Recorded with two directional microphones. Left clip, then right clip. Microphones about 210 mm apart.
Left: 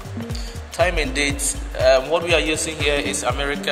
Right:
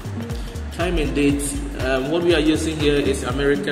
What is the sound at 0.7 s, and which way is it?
Speech, 50° left (ahead or behind).